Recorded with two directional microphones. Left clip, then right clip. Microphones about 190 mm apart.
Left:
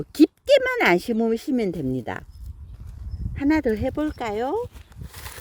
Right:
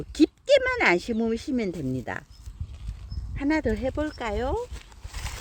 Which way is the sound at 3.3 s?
60° left (ahead or behind).